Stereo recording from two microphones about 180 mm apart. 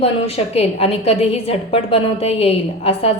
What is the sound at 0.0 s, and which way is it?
A woman's voice, 35° left (ahead or behind).